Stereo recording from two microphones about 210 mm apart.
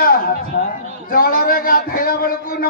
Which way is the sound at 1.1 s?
45° left (ahead or behind).